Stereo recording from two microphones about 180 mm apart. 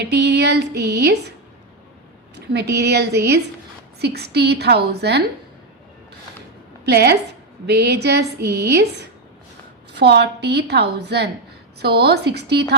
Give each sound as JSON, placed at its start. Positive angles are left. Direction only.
{"t": 0.0, "sound": "a woman's voice", "side_deg": -70}
{"t": 2.5, "sound": "a woman's voice", "side_deg": -65}
{"t": 6.8, "sound": "a woman's voice", "side_deg": -65}
{"t": 9.9, "sound": "a woman's voice", "side_deg": -70}